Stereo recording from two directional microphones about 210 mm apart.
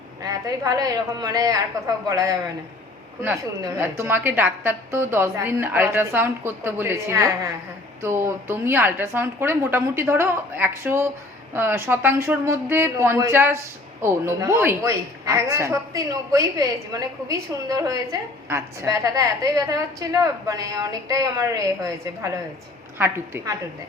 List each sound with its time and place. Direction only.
0.3 s a woman's voice: 15° right (ahead or behind)